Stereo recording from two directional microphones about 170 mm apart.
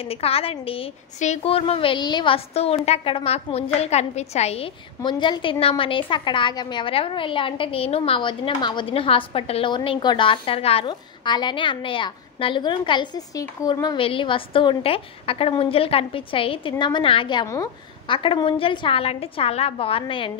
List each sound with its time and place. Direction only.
0.1 s a woman's voice: 35° left (ahead or behind)
5.0 s a woman's voice: 25° left (ahead or behind)